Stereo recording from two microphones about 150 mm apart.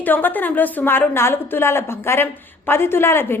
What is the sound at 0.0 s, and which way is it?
A woman's voice, 10° left (ahead or behind).